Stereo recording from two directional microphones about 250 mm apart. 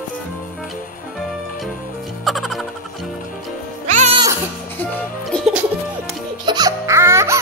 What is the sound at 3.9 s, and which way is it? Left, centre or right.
Music, right.